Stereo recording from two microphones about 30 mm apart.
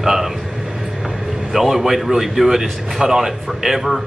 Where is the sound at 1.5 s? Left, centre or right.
Centre.